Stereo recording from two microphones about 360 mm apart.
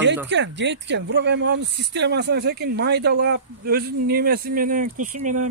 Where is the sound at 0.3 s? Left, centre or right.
Right.